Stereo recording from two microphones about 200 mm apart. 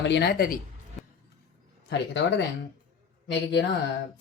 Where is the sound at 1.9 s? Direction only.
60° left (ahead or behind).